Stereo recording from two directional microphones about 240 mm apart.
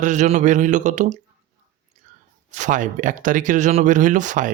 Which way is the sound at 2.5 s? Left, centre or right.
Right.